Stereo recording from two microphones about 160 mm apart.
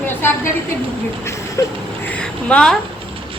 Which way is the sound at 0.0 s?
15° left (ahead or behind).